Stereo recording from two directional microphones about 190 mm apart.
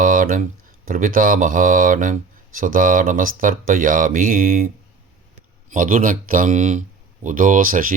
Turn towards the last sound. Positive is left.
turn(degrees=-45)  # may be behind; listen again after turning